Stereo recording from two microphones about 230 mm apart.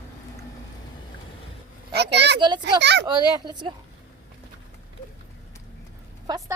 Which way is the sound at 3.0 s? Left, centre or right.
Centre.